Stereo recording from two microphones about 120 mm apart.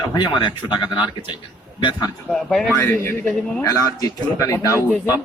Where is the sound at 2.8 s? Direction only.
20° left (ahead or behind).